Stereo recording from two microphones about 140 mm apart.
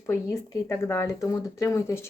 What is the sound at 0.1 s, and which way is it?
Speech, 20° left (ahead or behind).